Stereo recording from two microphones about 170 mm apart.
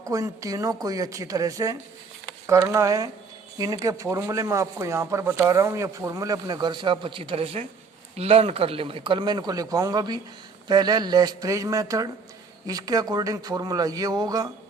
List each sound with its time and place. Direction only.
0.0 s speech: 20° right (ahead or behind)